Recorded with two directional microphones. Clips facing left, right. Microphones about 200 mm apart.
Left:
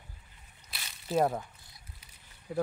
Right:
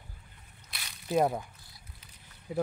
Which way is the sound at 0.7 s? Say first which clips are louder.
Right 2 dB; 5° left (ahead or behind).